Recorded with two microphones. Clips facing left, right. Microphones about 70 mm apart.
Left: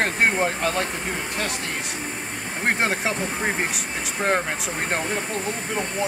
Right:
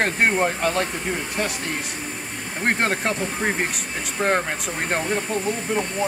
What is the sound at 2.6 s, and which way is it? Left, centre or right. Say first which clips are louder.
Speech: right 1 dB; centre.